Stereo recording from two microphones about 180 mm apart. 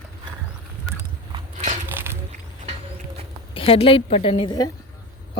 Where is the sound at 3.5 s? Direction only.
30° left (ahead or behind).